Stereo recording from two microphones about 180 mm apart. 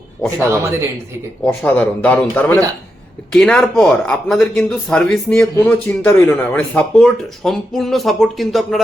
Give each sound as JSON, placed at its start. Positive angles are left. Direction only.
{"t": 0.3, "sound": "speech", "side_deg": -15}
{"t": 1.5, "sound": "a man's voice", "side_deg": 10}